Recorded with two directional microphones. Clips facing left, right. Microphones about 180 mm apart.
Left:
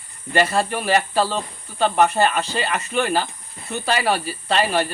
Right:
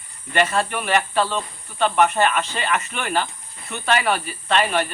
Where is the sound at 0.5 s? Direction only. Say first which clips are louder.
Left 2 dB; 35° left (ahead or behind).